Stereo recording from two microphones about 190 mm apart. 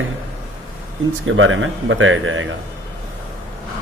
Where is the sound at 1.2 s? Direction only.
90° right.